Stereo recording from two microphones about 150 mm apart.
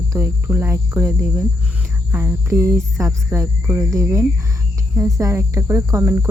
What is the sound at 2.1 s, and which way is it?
Cricket, 15° right (ahead or behind).